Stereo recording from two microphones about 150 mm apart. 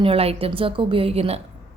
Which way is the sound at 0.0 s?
40° right (ahead or behind).